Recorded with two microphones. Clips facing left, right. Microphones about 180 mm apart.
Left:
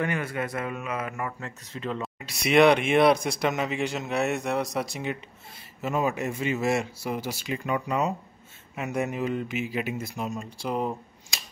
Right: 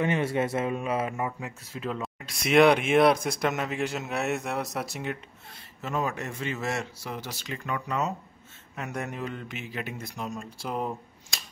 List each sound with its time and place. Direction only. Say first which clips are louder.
0.0 s a man's voice: right 3 dB; 25° right (ahead or behind)
1.4 s a man's voice: even; 5° right (ahead or behind)